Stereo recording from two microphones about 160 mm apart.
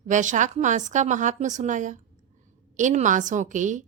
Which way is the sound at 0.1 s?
50° right (ahead or behind).